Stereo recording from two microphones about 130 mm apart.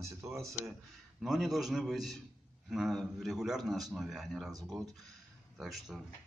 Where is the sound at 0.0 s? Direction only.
25° right (ahead or behind).